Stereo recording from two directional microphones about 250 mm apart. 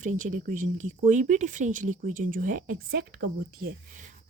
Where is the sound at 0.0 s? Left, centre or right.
Right.